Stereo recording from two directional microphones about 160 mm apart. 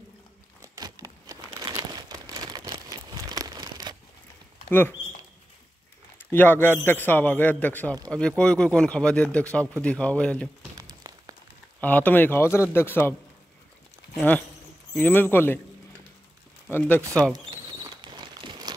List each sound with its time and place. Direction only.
0.7 s crumpling: 20° right (ahead or behind)
4.6 s speech: 10° left (ahead or behind)
6.1 s speech: 10° left (ahead or behind)
10.8 s a sound: 25° right (ahead or behind)
11.8 s speech: 10° left (ahead or behind)
15.0 s speech: 10° left (ahead or behind)
16.7 s speech: 10° left (ahead or behind)
17.2 s crumpling: 25° right (ahead or behind)